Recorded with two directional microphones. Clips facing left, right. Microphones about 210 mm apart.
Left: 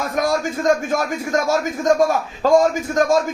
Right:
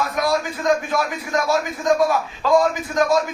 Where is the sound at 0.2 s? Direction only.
45° left (ahead or behind).